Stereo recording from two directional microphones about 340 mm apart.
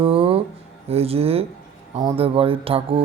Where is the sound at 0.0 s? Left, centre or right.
Centre.